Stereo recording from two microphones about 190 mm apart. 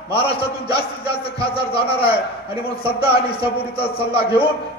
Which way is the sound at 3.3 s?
30° left (ahead or behind).